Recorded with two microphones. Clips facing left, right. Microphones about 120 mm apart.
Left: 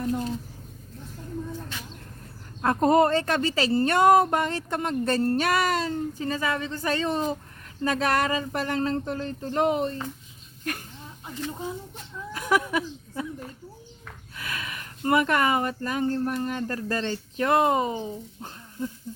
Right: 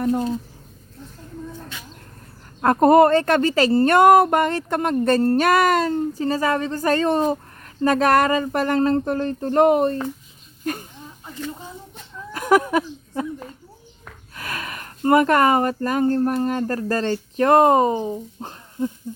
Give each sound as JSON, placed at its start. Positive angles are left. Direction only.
{"t": 0.0, "sound": "speech", "side_deg": -65}
{"t": 2.6, "sound": "speech", "side_deg": -60}
{"t": 3.9, "sound": "speech", "side_deg": -65}
{"t": 6.1, "sound": "speech", "side_deg": -40}
{"t": 12.3, "sound": "a sound", "side_deg": -50}
{"t": 14.3, "sound": "a sound", "side_deg": -45}
{"t": 15.0, "sound": "speech", "side_deg": -45}
{"t": 18.8, "sound": "speech", "side_deg": -20}